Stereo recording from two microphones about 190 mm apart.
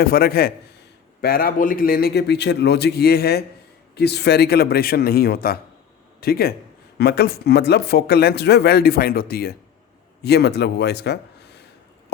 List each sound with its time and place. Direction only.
0.0 s a man's voice: 55° left (ahead or behind)